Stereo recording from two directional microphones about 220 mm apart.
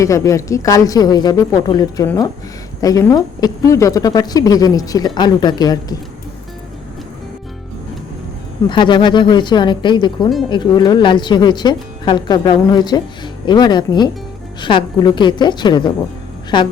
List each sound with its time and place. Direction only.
0.0 s a woman's voice: 15° left (ahead or behind)
8.7 s speech: 20° left (ahead or behind)